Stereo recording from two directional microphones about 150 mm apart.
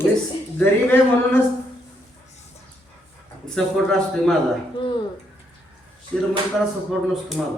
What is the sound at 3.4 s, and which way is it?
Speech, 5° left (ahead or behind).